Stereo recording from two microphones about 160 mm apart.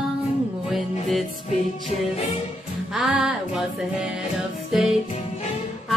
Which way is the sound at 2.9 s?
5° right (ahead or behind).